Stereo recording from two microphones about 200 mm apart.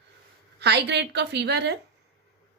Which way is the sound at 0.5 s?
55° right (ahead or behind).